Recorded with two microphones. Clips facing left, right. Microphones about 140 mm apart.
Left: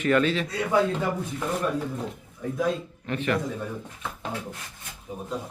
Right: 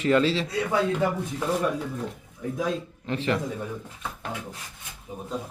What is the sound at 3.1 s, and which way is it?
Speech, 25° right (ahead or behind).